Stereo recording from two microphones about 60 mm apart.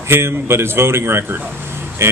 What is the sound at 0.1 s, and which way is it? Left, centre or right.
A man's voice, right.